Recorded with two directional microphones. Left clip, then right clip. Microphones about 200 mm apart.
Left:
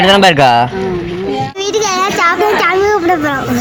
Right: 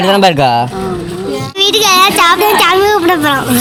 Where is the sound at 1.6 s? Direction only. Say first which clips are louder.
Right 7 dB; 15° right (ahead or behind).